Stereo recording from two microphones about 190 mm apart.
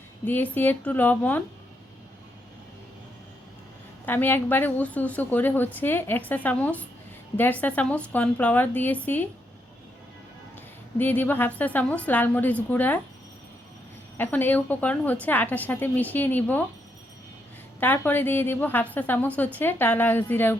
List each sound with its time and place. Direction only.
0.3 s a woman's voice: 10° left (ahead or behind)
4.0 s a woman's voice: 10° left (ahead or behind)
10.9 s a woman's voice: 10° left (ahead or behind)
14.2 s a woman's voice: 10° left (ahead or behind)
17.7 s a woman's voice: 10° left (ahead or behind)